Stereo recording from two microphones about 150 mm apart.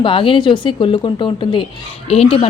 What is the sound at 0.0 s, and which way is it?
A woman's voice, 35° left (ahead or behind).